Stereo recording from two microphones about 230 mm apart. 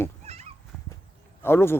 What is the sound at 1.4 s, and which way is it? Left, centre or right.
Speech, centre.